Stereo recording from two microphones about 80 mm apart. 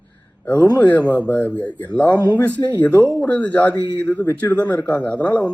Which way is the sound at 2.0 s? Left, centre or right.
Left.